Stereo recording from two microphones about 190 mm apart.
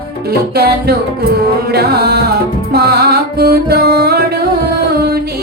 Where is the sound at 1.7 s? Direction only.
55° right (ahead or behind).